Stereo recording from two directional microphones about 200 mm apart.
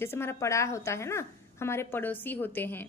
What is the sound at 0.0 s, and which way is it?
Speech, 10° left (ahead or behind).